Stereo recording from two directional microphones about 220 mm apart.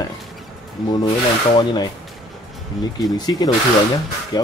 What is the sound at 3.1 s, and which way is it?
Speech, 20° left (ahead or behind).